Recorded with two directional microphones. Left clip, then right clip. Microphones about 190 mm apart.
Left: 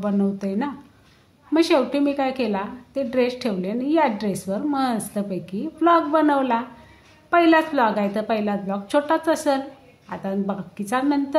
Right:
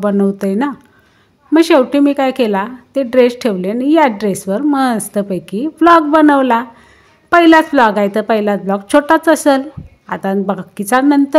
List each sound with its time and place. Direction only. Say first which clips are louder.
0.0 s a woman's voice: right 10 dB; 40° right (ahead or behind)